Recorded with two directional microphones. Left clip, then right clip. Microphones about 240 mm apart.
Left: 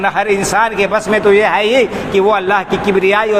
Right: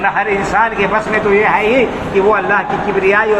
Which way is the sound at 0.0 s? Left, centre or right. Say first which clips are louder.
Even; left.